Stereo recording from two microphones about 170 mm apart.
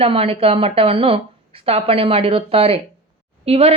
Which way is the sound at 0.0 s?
35° right (ahead or behind).